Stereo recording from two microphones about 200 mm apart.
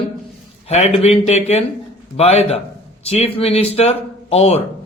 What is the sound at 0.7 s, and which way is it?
Speech, 30° left (ahead or behind).